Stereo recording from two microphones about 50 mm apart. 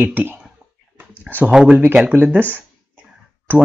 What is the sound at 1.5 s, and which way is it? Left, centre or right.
Speech, centre.